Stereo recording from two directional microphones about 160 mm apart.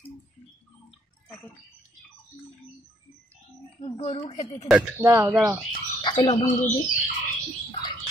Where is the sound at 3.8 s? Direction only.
35° left (ahead or behind).